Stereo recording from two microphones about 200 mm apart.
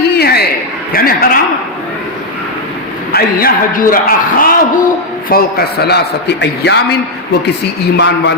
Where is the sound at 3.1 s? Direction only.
50° left (ahead or behind).